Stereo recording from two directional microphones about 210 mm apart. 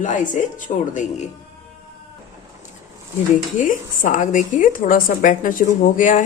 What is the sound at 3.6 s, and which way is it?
A woman's voice, 40° left (ahead or behind).